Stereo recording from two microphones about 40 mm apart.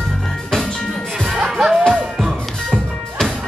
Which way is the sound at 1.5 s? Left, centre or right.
Centre.